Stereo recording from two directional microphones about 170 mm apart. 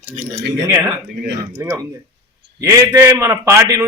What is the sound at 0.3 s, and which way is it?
Speech, 90° right.